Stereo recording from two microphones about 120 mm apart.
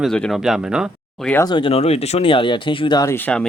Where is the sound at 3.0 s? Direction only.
20° left (ahead or behind).